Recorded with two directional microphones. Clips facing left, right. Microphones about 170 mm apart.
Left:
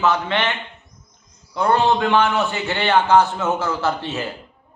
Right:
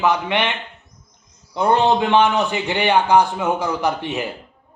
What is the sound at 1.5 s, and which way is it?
A man's voice, 20° right (ahead or behind).